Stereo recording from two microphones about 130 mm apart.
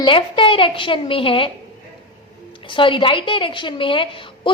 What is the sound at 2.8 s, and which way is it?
A woman's voice, 40° left (ahead or behind).